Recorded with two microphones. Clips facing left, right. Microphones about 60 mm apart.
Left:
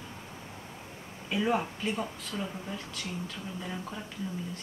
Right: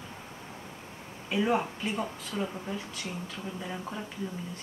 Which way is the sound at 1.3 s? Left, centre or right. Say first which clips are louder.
Right 1 dB; centre.